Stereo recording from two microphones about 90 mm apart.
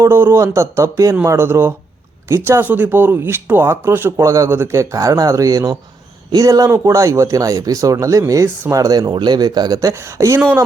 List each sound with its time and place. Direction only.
0.0 s speech: 25° right (ahead or behind)